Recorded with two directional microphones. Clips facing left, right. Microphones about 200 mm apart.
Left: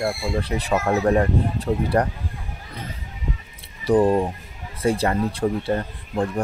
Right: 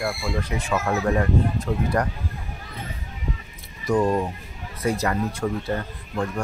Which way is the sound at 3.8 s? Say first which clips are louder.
Left 4 dB; 35° left (ahead or behind).